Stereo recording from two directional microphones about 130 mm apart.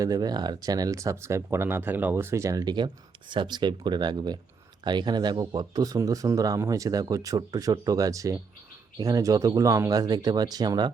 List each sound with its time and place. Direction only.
0.0 s speech: 30° right (ahead or behind)